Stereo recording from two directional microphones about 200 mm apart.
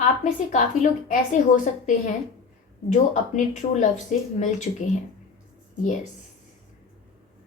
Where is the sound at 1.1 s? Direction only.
40° left (ahead or behind).